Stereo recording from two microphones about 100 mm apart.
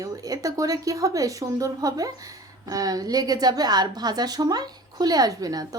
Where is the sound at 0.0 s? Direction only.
35° right (ahead or behind).